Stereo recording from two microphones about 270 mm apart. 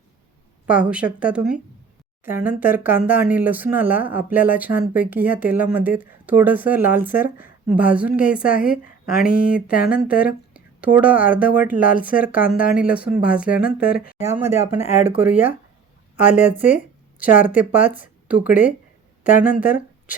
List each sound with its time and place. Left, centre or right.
0.7 s speech: centre
8.4 s a woman's voice: left
8.7 s a woman's voice: centre